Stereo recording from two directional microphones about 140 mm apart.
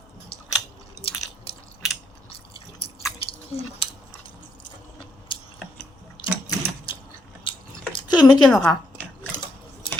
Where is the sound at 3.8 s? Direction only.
40° left (ahead or behind).